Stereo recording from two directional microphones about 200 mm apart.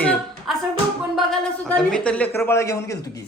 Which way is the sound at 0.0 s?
5° left (ahead or behind).